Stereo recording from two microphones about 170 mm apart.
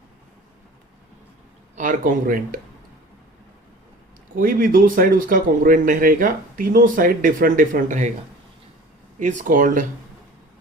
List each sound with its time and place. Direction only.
1.7 s speech: 50° right (ahead or behind)
4.4 s speech: 55° right (ahead or behind)
9.1 s speech: 50° right (ahead or behind)